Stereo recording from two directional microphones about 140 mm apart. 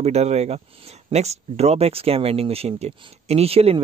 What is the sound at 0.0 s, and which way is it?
Speech, 50° right (ahead or behind).